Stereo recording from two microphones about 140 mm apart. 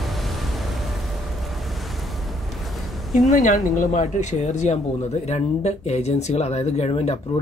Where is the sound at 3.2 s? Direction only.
60° left (ahead or behind).